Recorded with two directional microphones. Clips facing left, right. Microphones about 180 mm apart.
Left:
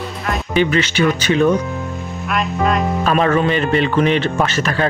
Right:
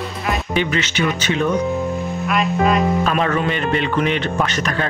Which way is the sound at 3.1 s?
40° left (ahead or behind).